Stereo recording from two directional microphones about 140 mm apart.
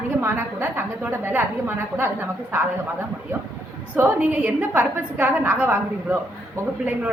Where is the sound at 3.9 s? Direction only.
15° right (ahead or behind).